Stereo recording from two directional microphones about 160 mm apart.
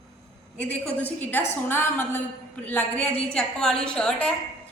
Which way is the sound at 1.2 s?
10° left (ahead or behind).